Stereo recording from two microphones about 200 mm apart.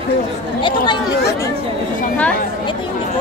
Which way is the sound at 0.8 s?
15° left (ahead or behind).